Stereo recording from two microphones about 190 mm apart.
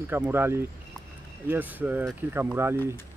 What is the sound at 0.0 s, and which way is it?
Speech, 10° right (ahead or behind).